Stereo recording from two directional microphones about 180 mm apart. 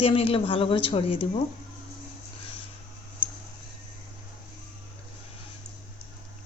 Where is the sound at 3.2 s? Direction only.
5° right (ahead or behind).